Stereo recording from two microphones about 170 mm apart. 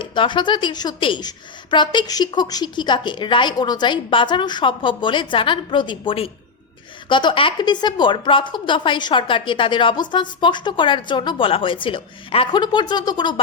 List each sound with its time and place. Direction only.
0.0 s a woman's voice: 30° left (ahead or behind)